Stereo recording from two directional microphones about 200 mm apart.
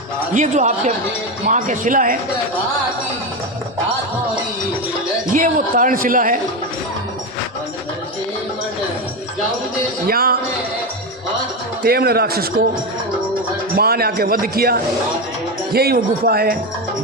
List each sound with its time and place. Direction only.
0.3 s speech: 35° right (ahead or behind)
5.3 s speech: 40° right (ahead or behind)
10.1 s speech: 50° right (ahead or behind)
11.8 s speech: 50° right (ahead or behind)
13.7 s speech: 50° right (ahead or behind)